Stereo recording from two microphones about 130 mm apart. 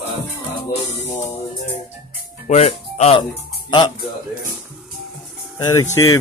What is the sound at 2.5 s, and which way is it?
Speech, 60° left (ahead or behind).